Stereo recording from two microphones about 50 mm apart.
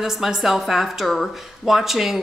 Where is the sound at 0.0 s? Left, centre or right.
Centre.